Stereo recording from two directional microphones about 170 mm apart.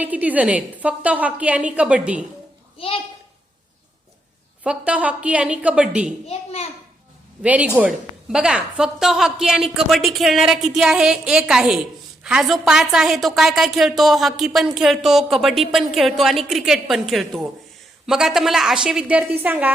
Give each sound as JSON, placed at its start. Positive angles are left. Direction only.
{"t": 0.0, "sound": "a woman's voice", "side_deg": -10}
{"t": 2.7, "sound": "a child's voice", "side_deg": 35}
{"t": 4.6, "sound": "a woman's voice", "side_deg": -5}
{"t": 6.2, "sound": "a child's voice", "side_deg": 35}
{"t": 7.4, "sound": "a woman's voice", "side_deg": -10}